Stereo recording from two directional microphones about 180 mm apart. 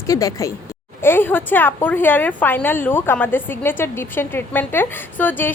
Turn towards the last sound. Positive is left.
turn(degrees=10)  # may be behind; listen again after turning